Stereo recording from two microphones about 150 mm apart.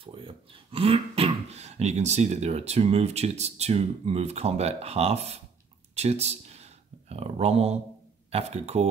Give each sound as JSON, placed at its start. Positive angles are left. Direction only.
{"t": 0.0, "sound": "speech", "side_deg": -35}